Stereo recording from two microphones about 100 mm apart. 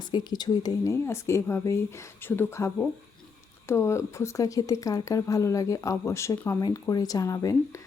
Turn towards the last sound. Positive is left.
turn(degrees=35)  # may be behind; listen again after turning